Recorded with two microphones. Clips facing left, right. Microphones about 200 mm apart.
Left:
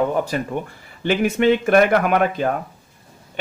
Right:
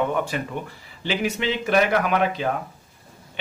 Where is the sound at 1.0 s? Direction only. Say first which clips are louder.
Left 7 dB; 55° left (ahead or behind).